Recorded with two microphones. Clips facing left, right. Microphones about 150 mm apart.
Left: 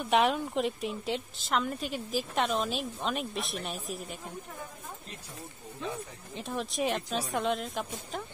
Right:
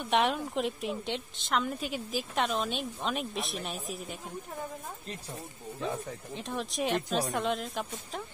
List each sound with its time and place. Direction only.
0.0 s a woman's voice: centre (ahead or behind)
6.3 s a woman's voice: centre (ahead or behind)